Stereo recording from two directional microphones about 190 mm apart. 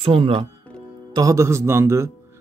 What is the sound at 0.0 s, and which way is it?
Speech, 30° right (ahead or behind).